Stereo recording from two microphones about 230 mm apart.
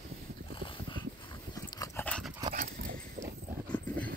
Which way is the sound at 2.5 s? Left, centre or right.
Right.